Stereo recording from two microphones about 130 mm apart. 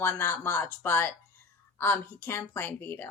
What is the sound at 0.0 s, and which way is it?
Speech, 15° left (ahead or behind).